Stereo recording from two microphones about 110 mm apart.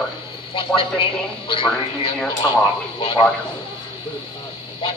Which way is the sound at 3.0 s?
50° left (ahead or behind).